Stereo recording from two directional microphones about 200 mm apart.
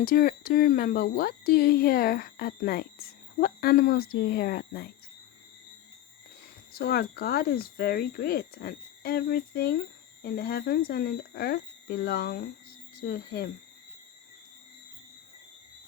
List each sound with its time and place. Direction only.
0.0 s speech: 45° left (ahead or behind)
6.7 s speech: 50° left (ahead or behind)